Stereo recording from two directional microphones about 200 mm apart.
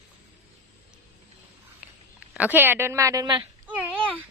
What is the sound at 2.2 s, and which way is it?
Speech, 5° right (ahead or behind).